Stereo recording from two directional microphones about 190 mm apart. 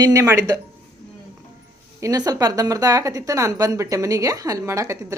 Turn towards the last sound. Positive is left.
turn(degrees=-15)  # may be behind; listen again after turning